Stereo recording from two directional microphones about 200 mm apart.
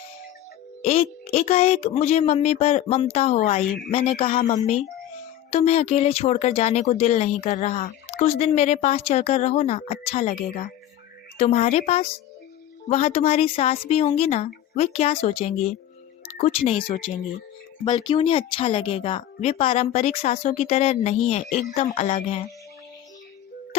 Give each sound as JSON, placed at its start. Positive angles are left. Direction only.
{"t": 0.8, "sound": "music", "side_deg": 30}
{"t": 1.3, "sound": "speech", "side_deg": 30}
{"t": 11.3, "sound": "speech", "side_deg": 30}